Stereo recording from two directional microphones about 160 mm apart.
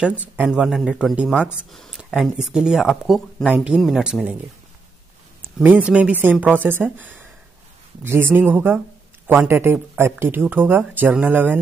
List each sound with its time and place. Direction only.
0.4 s speech: 5° right (ahead or behind)
5.6 s speech: 10° right (ahead or behind)